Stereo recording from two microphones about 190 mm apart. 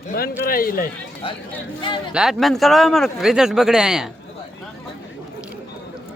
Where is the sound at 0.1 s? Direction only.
50° left (ahead or behind).